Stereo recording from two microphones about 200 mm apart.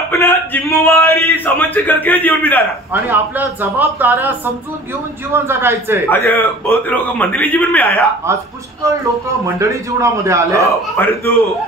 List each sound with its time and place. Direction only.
0.1 s speech: 10° left (ahead or behind)
2.9 s speech: 10° right (ahead or behind)
6.0 s a man's voice: 10° left (ahead or behind)
9.6 s speech: 15° right (ahead or behind)
11.0 s a man's voice: 10° left (ahead or behind)